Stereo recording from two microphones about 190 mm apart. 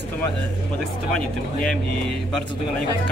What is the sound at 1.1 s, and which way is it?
Speech, 5° left (ahead or behind).